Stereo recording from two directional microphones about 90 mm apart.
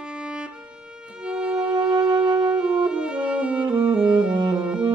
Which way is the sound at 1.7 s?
50° right (ahead or behind).